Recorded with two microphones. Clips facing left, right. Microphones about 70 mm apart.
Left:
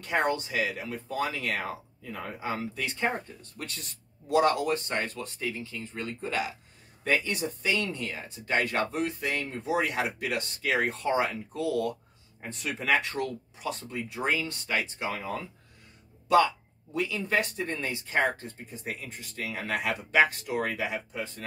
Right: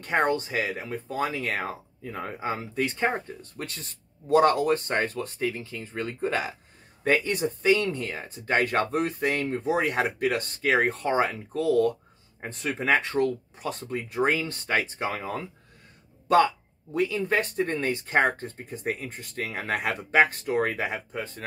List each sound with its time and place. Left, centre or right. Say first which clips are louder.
0.0 s speech: right 3 dB; right
13.6 s speech: right 2 dB; right